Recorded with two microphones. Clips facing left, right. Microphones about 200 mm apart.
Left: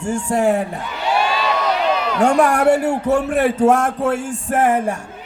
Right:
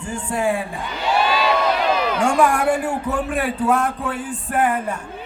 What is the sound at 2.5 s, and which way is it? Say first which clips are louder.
Speech: left 5 dB; 70° left (ahead or behind).